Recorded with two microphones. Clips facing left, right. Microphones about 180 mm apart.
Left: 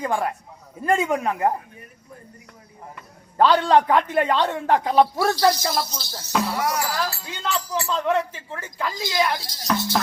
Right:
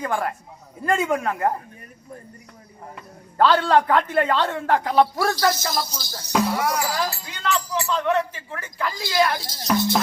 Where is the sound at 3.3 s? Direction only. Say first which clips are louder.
Left 1 dB; 15° left (ahead or behind).